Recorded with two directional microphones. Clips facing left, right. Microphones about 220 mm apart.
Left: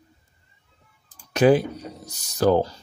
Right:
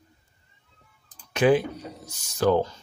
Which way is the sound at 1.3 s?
40° left (ahead or behind).